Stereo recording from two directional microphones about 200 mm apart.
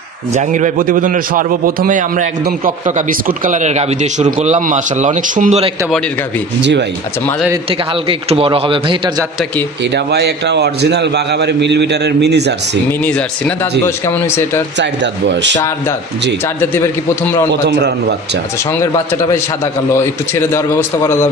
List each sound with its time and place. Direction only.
0.3 s a man's voice: 40° right (ahead or behind)
8.1 s speech: 25° right (ahead or behind)
9.9 s a man's voice: 55° right (ahead or behind)
13.8 s a man's voice: 10° left (ahead or behind)
14.8 s a man's voice: 60° right (ahead or behind)
16.7 s a man's voice: 10° left (ahead or behind)
17.5 s a man's voice: 55° right (ahead or behind)
19.9 s a man's voice: 15° left (ahead or behind)